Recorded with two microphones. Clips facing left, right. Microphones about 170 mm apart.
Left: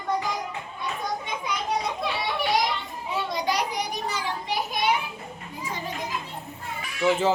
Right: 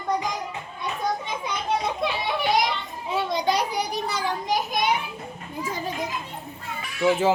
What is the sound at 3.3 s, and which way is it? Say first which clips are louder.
Children playing: right 3 dB; 30° right (ahead or behind).